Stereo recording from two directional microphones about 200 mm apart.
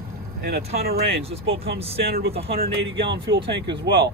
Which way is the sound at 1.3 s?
30° right (ahead or behind).